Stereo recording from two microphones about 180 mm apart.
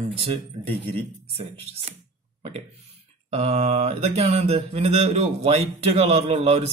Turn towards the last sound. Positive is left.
turn(degrees=-35)  # may be behind; listen again after turning